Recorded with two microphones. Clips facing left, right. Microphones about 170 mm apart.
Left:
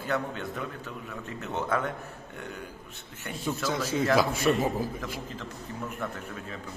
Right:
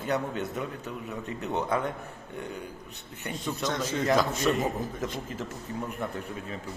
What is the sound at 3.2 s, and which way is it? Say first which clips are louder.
A man's voice: even; centre (ahead or behind).